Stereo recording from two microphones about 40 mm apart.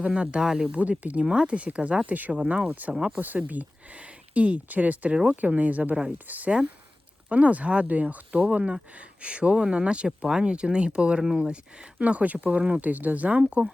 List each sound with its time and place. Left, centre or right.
0.1 s speech: right
1.2 s speech: right
2.4 s speech: right
2.6 s speech: right
2.9 s speech: centre
3.2 s speech: right
5.1 s speech: right
5.4 s speech: right
7.3 s speech: right
11.9 s speech: right